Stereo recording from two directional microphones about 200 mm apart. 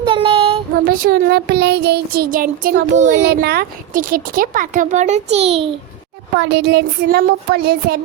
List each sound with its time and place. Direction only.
0.0 s child singing: 25° right (ahead or behind)
1.0 s child singing: 50° right (ahead or behind)
3.2 s speech: 50° right (ahead or behind); by 5.7 s 30° right (ahead or behind)
6.3 s speech: 60° right (ahead or behind)